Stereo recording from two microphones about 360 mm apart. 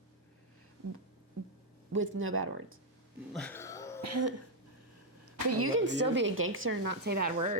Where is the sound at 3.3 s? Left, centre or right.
Centre.